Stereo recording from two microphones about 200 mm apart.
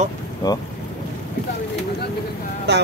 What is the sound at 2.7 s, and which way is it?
Speech, 55° right (ahead or behind).